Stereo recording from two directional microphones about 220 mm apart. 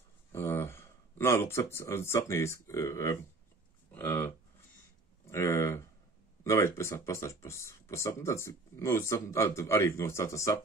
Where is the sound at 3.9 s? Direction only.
10° left (ahead or behind).